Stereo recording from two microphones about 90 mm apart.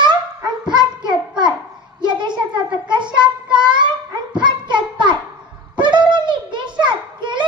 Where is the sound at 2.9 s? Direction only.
60° right (ahead or behind).